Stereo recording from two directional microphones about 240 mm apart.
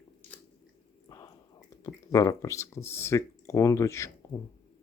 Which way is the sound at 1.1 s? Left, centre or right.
Centre.